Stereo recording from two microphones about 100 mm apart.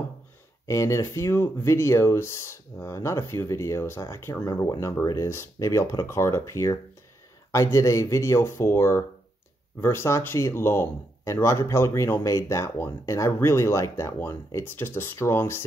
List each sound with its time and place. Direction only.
0.7 s speech: 30° left (ahead or behind)